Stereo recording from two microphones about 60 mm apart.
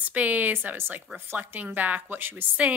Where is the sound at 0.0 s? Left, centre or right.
Right.